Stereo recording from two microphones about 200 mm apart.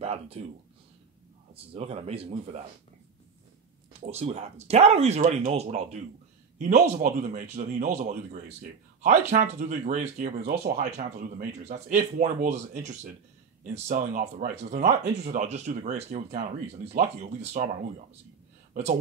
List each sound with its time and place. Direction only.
0.0 s speech: 30° right (ahead or behind)
1.5 s speech: 30° right (ahead or behind)
4.0 s speech: 30° right (ahead or behind)
10.4 s speech: 50° right (ahead or behind)
11.0 s speech: 35° right (ahead or behind)